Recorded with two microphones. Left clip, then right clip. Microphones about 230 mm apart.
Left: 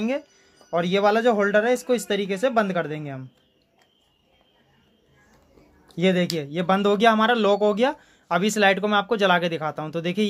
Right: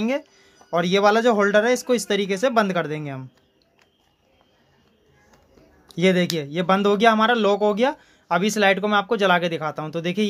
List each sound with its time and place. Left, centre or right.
0.0 s speech: centre
5.9 s speech: centre